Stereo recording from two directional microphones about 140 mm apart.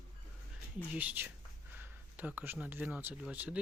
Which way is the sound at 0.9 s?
15° right (ahead or behind).